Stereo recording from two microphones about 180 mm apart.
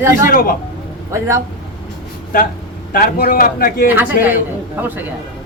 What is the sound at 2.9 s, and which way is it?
Speech, 55° left (ahead or behind).